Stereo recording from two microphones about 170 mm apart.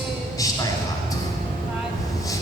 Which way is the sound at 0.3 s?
20° left (ahead or behind).